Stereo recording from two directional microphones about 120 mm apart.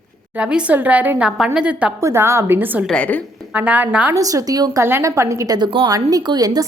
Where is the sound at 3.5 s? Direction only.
10° right (ahead or behind).